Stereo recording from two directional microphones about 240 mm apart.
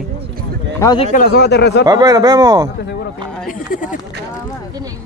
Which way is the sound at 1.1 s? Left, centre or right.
Left.